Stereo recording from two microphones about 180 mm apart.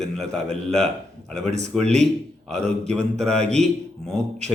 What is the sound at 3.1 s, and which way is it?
Speech, 5° left (ahead or behind).